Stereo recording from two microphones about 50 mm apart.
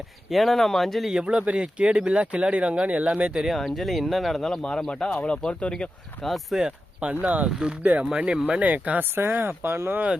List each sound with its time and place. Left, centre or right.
0.3 s speech: centre
1.1 s speech: right
3.4 s speech: centre
5.2 s speech: centre
6.2 s speech: centre
6.6 s speech: centre
7.1 s speech: right
9.1 s speech: right